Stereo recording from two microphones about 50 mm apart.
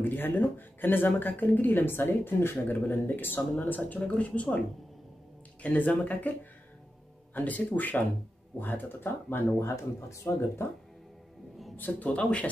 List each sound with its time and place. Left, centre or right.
0.0 s a woman's voice: left
4.0 s speech: left
5.6 s a woman's voice: left
7.3 s a woman's voice: left
10.3 s speech: left
11.7 s speech: left